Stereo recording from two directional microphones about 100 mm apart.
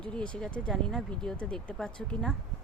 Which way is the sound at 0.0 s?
10° left (ahead or behind).